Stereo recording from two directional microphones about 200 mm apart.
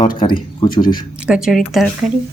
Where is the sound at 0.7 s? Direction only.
45° left (ahead or behind).